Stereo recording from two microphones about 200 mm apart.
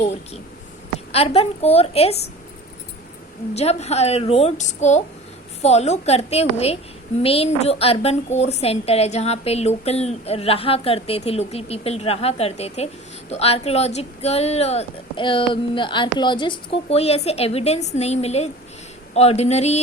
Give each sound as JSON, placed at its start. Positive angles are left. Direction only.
{"t": 1.1, "sound": "a woman's voice", "side_deg": 30}
{"t": 3.5, "sound": "a woman's voice", "side_deg": 30}